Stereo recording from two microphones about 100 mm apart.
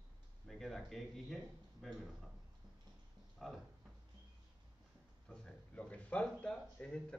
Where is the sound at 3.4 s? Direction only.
5° left (ahead or behind).